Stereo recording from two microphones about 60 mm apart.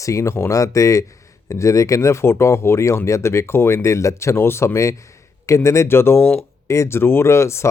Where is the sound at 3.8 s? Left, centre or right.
Left.